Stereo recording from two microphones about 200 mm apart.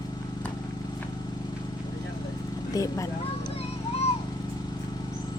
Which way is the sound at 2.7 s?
15° left (ahead or behind).